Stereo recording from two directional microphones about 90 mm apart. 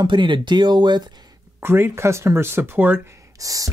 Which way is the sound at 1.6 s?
25° right (ahead or behind).